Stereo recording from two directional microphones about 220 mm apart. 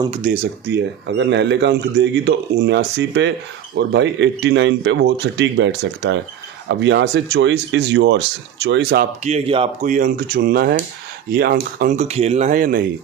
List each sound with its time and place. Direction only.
0.2 s speech: 40° right (ahead or behind)
0.7 s speech: 50° right (ahead or behind)
9.2 s speech: 30° right (ahead or behind)